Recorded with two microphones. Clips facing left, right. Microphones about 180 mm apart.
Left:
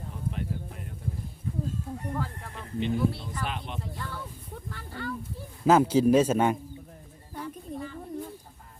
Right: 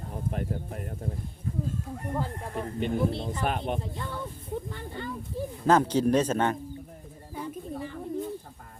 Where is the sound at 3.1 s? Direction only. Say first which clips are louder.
Right 5 dB; 25° right (ahead or behind).